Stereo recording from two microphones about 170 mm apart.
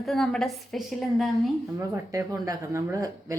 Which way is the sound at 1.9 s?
20° right (ahead or behind).